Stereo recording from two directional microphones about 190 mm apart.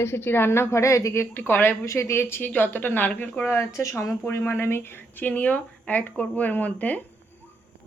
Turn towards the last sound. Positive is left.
turn(degrees=10)  # may be behind; listen again after turning